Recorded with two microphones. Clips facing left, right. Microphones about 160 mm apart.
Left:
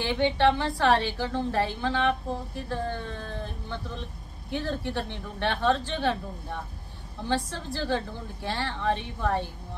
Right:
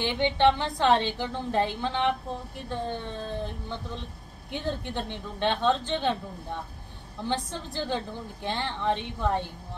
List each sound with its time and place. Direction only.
0.0 s a woman's voice: 20° right (ahead or behind)